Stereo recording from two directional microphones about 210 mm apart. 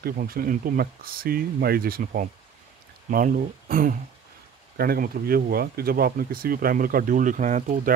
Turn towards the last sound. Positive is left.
turn(degrees=-35)  # may be behind; listen again after turning